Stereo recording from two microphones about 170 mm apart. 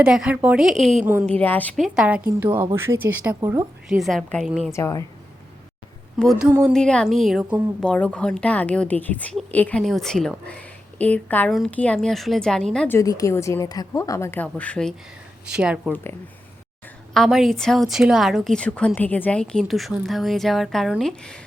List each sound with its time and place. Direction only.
0.0 s a woman's voice: 5° right (ahead or behind)
1.0 s speech: 10° right (ahead or behind)
1.3 s a woman's voice: 10° left (ahead or behind); by 3.7 s 20° right (ahead or behind)
3.8 s a woman's voice: centre (ahead or behind)
4.7 s a woman's voice: 15° left (ahead or behind)
6.1 s a woman's voice: centre (ahead or behind)
6.5 s speech: 15° right (ahead or behind)
6.7 s a woman's voice: 5° left (ahead or behind)
13.0 s a woman's voice: 20° left (ahead or behind)
15.4 s a woman's voice: 5° right (ahead or behind)
17.2 s a woman's voice: centre (ahead or behind)